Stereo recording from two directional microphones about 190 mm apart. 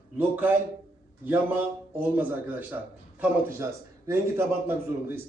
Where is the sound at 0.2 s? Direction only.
10° right (ahead or behind).